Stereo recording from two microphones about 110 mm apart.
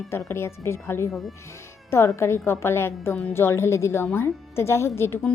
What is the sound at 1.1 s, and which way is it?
Speech, centre (ahead or behind).